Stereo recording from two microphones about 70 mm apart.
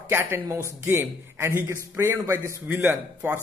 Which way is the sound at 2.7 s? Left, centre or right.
Right.